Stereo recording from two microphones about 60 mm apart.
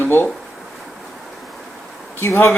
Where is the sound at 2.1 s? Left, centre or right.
Left.